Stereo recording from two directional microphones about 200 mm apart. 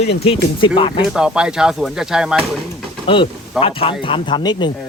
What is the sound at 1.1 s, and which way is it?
Speech, 5° right (ahead or behind).